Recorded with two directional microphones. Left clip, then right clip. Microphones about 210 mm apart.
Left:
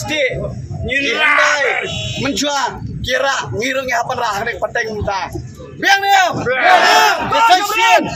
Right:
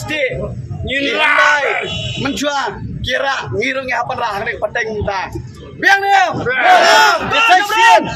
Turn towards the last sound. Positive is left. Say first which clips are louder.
# right 2 dB
turn(degrees=0)  # may be behind; listen again after turning